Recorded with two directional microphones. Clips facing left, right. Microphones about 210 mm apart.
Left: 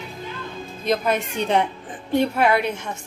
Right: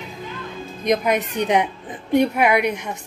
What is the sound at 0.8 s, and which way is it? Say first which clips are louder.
A woman's voice: right 2 dB; 15° right (ahead or behind).